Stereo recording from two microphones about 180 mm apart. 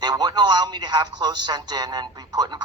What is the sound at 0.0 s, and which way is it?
Speech, 25° right (ahead or behind).